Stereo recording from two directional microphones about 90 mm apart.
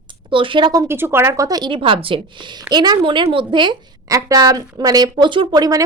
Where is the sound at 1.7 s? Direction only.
85° right; by 3.8 s 60° right (ahead or behind).